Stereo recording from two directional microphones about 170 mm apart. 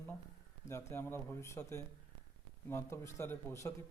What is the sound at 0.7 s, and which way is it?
Speech, 15° left (ahead or behind).